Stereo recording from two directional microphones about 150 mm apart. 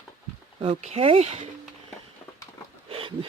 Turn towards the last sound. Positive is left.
turn(degrees=-40)  # may be behind; listen again after turning